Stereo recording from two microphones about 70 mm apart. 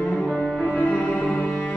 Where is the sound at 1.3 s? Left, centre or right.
Left.